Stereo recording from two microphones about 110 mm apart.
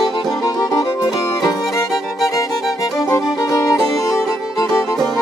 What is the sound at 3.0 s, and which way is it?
Music, 30° left (ahead or behind).